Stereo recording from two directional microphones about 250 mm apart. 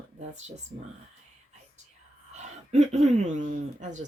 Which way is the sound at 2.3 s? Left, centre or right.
Right.